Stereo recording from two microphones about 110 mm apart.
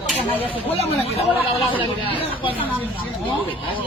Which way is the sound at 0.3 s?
15° left (ahead or behind).